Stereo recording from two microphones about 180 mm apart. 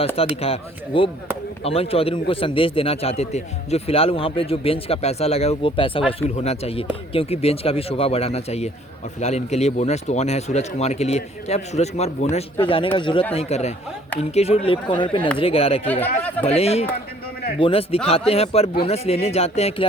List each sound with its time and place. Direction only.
0.4 s a man's voice: 30° left (ahead or behind)